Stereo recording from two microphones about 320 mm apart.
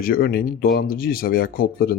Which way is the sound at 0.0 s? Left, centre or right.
Left.